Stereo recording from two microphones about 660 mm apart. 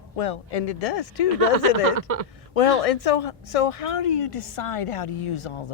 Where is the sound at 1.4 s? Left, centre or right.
Right.